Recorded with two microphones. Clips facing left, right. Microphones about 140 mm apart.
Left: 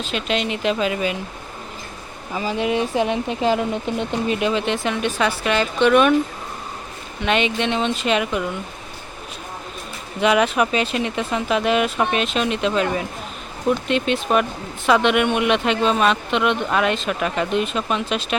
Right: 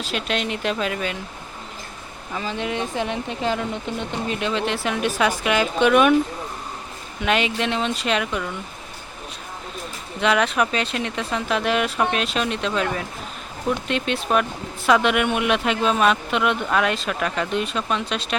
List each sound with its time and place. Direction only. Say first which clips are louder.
0.0 s speech: left 2 dB; centre (ahead or behind)
2.3 s speech: left 5 dB; 10° left (ahead or behind); by 6.1 s 10° right (ahead or behind)
7.2 s speech: left 2 dB; centre (ahead or behind)
10.2 s speech: left 3 dB; 5° left (ahead or behind)